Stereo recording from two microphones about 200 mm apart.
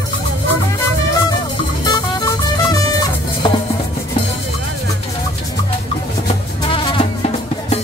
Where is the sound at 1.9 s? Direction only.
20° left (ahead or behind).